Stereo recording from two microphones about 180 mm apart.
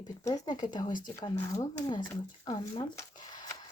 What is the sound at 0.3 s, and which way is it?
Speech, 20° left (ahead or behind).